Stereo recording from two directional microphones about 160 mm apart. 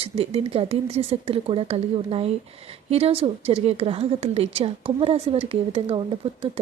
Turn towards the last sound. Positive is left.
turn(degrees=-35)  # may be behind; listen again after turning